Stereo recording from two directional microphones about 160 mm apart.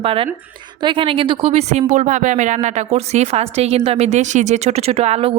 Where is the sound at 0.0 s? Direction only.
35° right (ahead or behind).